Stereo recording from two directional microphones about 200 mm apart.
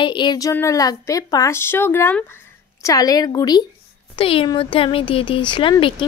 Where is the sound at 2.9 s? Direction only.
20° left (ahead or behind).